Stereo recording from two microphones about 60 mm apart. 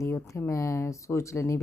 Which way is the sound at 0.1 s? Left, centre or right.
Left.